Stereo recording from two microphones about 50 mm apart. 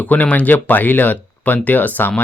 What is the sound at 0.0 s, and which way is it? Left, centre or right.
Speech, left.